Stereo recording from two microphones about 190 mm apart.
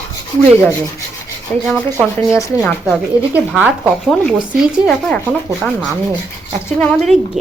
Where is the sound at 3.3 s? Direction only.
5° right (ahead or behind).